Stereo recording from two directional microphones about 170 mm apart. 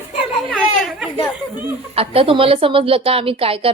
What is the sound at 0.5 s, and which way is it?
Speech, centre (ahead or behind).